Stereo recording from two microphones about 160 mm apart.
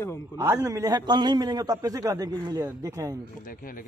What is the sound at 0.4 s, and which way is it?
A man's voice, 20° right (ahead or behind).